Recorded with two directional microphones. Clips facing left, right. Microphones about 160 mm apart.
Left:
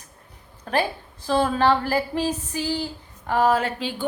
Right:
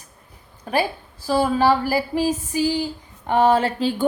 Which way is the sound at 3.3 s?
25° right (ahead or behind).